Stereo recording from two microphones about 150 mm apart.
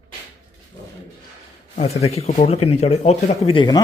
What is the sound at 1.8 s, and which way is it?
Speech, 45° left (ahead or behind).